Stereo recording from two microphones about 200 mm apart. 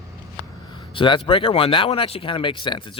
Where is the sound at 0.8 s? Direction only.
25° left (ahead or behind).